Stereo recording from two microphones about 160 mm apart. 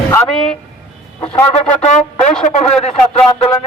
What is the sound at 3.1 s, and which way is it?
Speech, 35° left (ahead or behind).